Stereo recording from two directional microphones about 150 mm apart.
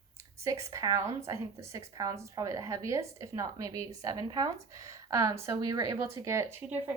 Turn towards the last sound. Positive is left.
turn(degrees=-15)  # may be behind; listen again after turning